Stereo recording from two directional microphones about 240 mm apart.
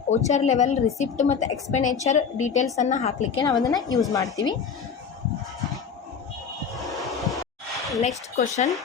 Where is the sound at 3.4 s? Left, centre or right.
Centre.